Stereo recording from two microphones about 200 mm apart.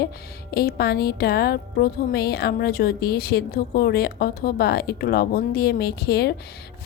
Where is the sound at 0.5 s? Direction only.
50° left (ahead or behind).